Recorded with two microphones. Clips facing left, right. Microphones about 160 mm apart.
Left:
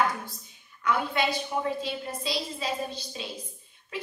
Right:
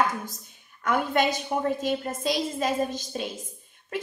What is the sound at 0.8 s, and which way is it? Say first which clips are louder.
A woman's voice: right 3 dB; 50° right (ahead or behind).